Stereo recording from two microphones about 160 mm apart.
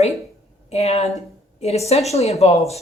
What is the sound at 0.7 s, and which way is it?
Speech, 40° left (ahead or behind).